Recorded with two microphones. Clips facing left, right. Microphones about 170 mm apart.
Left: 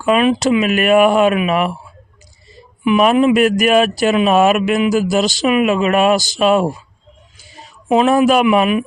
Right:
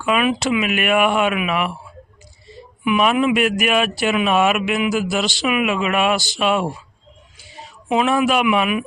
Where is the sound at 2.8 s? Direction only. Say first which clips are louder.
Left 5 dB; 35° left (ahead or behind).